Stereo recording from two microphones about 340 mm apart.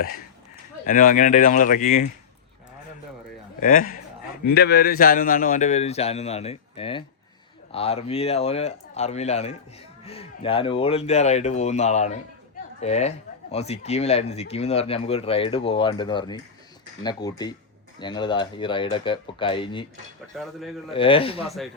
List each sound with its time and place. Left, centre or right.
0.9 s a man's voice: left
3.6 s a man's voice: left
20.3 s speech: centre
20.9 s speech: centre
21.4 s speech: centre